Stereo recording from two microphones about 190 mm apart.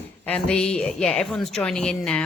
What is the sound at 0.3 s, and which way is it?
A woman's voice, 5° left (ahead or behind).